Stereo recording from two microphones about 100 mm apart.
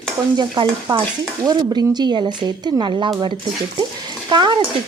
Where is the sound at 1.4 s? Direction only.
45° right (ahead or behind).